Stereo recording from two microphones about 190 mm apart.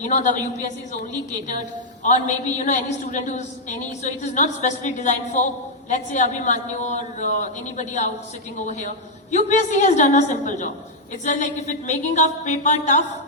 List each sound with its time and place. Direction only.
0.0 s a woman's voice: 40° left (ahead or behind)